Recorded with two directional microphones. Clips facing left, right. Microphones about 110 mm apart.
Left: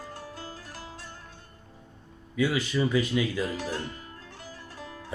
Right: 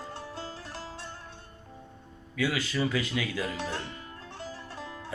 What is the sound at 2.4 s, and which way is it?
Speech, 20° left (ahead or behind).